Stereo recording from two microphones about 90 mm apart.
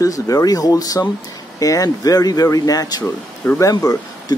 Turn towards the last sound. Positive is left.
turn(degrees=45)  # may be behind; listen again after turning